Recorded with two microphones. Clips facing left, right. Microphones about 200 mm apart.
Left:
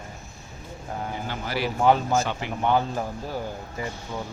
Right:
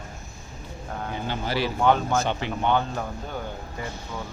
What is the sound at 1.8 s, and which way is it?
Speech, centre (ahead or behind).